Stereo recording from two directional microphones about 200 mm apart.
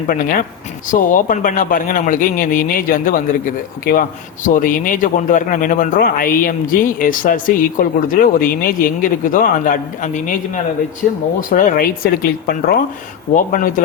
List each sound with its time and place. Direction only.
0.1 s a man's voice: 45° left (ahead or behind)